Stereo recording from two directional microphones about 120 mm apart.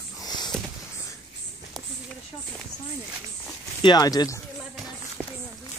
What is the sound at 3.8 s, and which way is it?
Speech, 35° left (ahead or behind).